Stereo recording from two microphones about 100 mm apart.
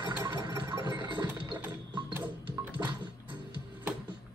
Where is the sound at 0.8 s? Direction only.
40° right (ahead or behind).